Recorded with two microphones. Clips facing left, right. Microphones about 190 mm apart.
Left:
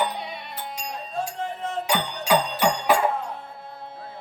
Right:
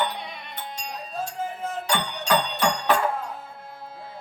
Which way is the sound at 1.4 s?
5° right (ahead or behind).